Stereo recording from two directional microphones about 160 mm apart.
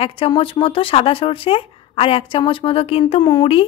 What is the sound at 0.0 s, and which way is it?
Speech, 35° left (ahead or behind).